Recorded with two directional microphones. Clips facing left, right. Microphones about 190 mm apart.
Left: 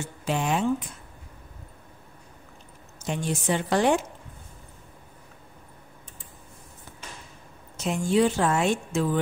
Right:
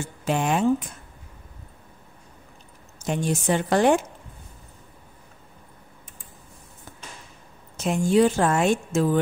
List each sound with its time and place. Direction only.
0.2 s speech: 50° right (ahead or behind)
3.1 s a woman's voice: 45° right (ahead or behind)
7.7 s a woman's voice: 50° right (ahead or behind)